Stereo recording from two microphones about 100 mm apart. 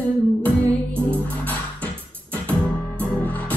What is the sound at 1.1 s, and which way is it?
Music, 15° left (ahead or behind).